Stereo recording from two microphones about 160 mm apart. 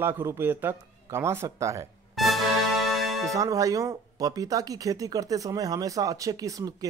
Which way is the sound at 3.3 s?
20° right (ahead or behind).